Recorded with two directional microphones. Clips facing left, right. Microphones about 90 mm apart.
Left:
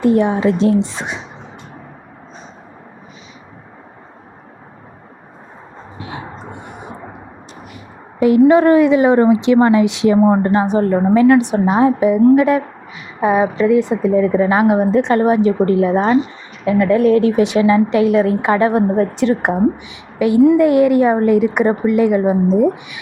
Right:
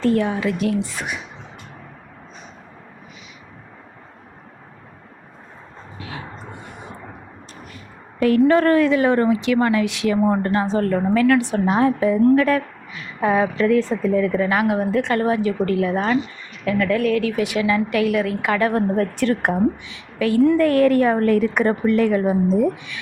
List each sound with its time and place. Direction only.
0.0 s speech: 20° left (ahead or behind)
6.0 s a sound: 25° left (ahead or behind)
8.4 s a woman's voice: 15° left (ahead or behind)